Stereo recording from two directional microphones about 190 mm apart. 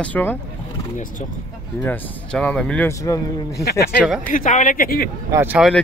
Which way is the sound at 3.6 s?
60° left (ahead or behind).